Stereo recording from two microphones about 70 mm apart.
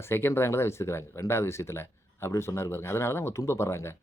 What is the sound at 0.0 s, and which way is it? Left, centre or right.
Speech, left.